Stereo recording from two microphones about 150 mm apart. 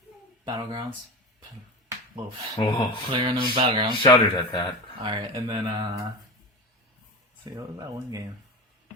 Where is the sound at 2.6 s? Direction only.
35° left (ahead or behind).